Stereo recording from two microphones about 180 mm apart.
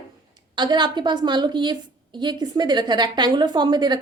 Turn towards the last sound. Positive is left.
turn(degrees=-25)  # may be behind; listen again after turning